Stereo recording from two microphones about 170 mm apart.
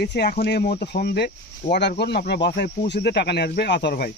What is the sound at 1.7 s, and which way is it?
Speech, 85° left.